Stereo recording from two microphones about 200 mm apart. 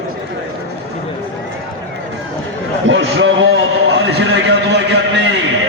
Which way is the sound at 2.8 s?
65° right (ahead or behind).